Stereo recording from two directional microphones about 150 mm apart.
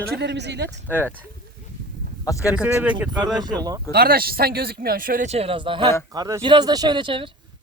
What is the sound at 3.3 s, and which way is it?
Speech, 25° right (ahead or behind).